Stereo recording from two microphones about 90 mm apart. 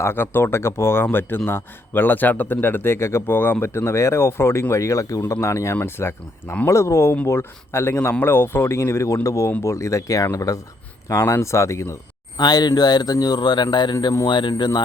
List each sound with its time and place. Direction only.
0.0 s speech: 25° left (ahead or behind)
12.4 s a man's voice: 50° left (ahead or behind)